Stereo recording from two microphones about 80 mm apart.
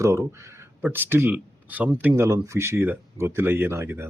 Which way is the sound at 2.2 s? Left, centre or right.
Right.